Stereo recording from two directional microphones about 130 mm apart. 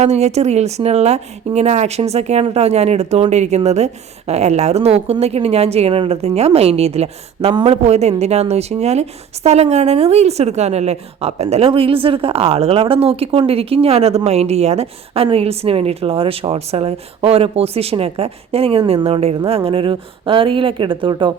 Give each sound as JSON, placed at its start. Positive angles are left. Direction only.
{"t": 0.0, "sound": "a woman's voice", "side_deg": -55}